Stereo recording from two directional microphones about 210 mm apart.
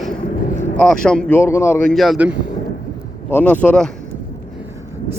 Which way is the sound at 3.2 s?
10° left (ahead or behind).